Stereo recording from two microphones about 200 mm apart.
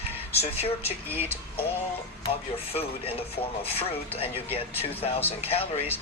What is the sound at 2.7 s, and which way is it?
Speech, 30° left (ahead or behind).